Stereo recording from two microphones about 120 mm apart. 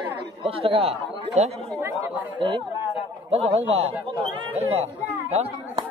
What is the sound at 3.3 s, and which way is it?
Speech, 60° right (ahead or behind).